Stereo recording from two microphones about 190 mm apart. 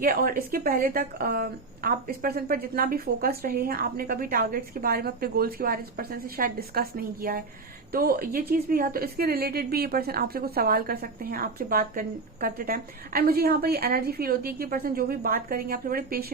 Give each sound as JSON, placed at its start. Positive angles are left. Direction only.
{"t": 0.0, "sound": "a woman's voice", "side_deg": -50}